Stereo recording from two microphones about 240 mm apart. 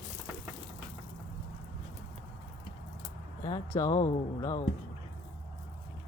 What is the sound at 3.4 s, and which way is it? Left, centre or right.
Speech, centre.